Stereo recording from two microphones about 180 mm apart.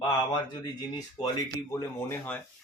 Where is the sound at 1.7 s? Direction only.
15° left (ahead or behind).